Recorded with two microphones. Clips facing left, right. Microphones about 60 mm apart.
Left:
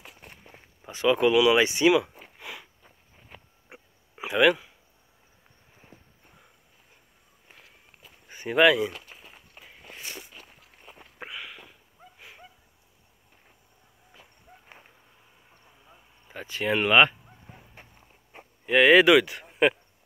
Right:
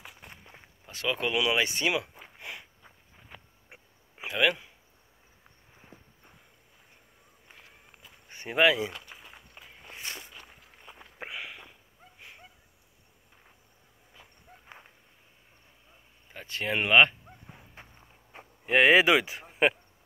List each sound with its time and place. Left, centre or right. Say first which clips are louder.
0.8 s speech: left 9 dB; centre
2.0 s a sound: left 7 dB; centre
4.3 s speech: left 6 dB; centre
8.5 s speech: left 4 dB; centre
11.1 s sniff: even; right
12.2 s a sound: left 1 dB; centre
16.3 s speech: left 4 dB; centre
16.7 s speech: left 2 dB; centre
18.7 s speech: left 3 dB; right
18.9 s speech: left 5 dB; right